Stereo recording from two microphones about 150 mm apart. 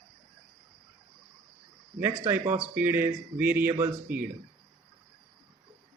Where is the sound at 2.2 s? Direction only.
15° right (ahead or behind).